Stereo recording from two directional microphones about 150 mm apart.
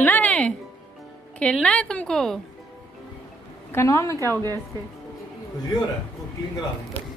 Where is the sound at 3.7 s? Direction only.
20° left (ahead or behind).